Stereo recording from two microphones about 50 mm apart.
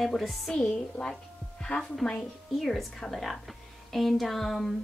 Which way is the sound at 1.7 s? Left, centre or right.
Left.